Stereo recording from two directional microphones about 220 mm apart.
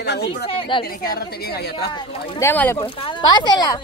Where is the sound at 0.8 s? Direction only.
45° left (ahead or behind).